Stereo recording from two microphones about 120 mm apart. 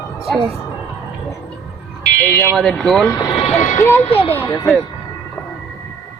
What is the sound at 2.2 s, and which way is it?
Speech, 10° left (ahead or behind).